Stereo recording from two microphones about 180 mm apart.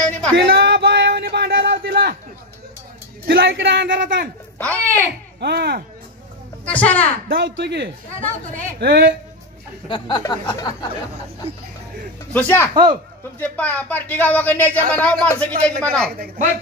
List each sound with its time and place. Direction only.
0.0 s a sound: 5° left (ahead or behind)
0.5 s a sound: 65° right (ahead or behind)
3.3 s speech: 65° right (ahead or behind); by 4.3 s 90° right
4.6 s speech: 5° left (ahead or behind)
5.4 s speech: 65° right (ahead or behind)
6.6 s speech: 10° left (ahead or behind)
7.2 s speech: 70° right (ahead or behind)
9.8 s speech: 25° left (ahead or behind)
12.3 s a man's voice: 10° left (ahead or behind)